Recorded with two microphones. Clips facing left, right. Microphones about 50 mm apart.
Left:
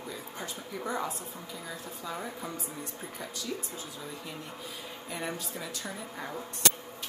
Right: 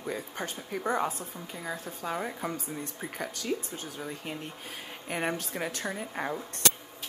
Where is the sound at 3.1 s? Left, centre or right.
Right.